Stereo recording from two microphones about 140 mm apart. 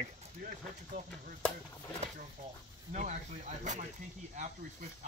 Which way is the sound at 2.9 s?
60° right (ahead or behind).